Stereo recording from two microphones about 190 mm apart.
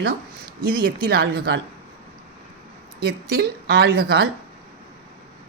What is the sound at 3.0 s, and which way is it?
A man's voice, 55° right (ahead or behind).